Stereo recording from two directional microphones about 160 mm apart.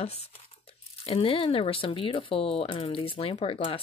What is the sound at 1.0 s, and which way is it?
Speech, 35° left (ahead or behind).